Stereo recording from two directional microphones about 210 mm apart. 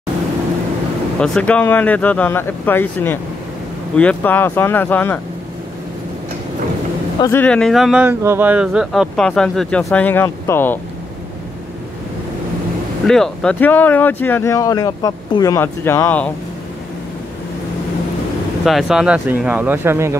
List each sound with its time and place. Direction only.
1.2 s speech: 5° left (ahead or behind)
7.2 s speech: 10° left (ahead or behind)
13.0 s speech: centre (ahead or behind)
18.7 s speech: centre (ahead or behind)